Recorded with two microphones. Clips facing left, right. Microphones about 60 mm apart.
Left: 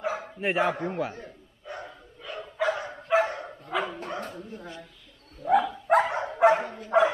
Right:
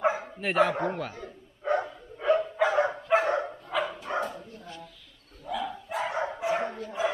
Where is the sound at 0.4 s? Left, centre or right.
Centre.